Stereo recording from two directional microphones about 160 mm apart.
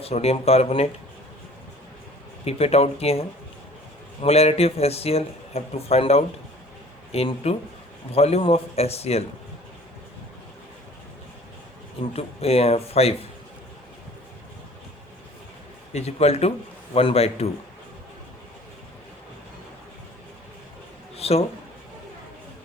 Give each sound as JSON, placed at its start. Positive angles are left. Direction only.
{"t": 0.0, "sound": "speech", "side_deg": 40}
{"t": 2.4, "sound": "speech", "side_deg": 40}
{"t": 12.1, "sound": "speech", "side_deg": 40}
{"t": 15.9, "sound": "speech", "side_deg": 40}
{"t": 21.2, "sound": "a sound", "side_deg": 40}